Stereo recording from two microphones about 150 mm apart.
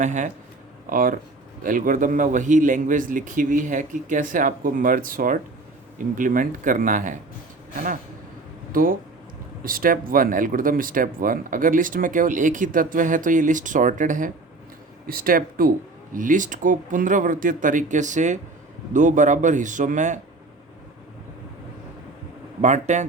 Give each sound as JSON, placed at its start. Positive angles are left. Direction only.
{"t": 0.0, "sound": "speech", "side_deg": -55}
{"t": 0.9, "sound": "speech", "side_deg": -70}
{"t": 8.7, "sound": "speech", "side_deg": -70}
{"t": 15.0, "sound": "speech", "side_deg": -75}
{"t": 16.1, "sound": "speech", "side_deg": -60}
{"t": 22.6, "sound": "speech", "side_deg": -50}